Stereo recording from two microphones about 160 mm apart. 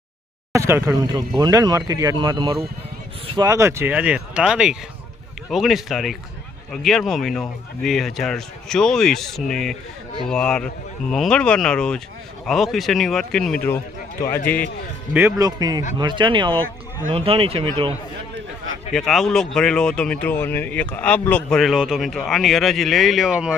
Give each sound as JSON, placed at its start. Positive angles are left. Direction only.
{"t": 0.5, "sound": "speech", "side_deg": -20}
{"t": 15.4, "sound": "speech", "side_deg": -25}
{"t": 18.9, "sound": "speech", "side_deg": 0}
{"t": 21.6, "sound": "speech", "side_deg": -5}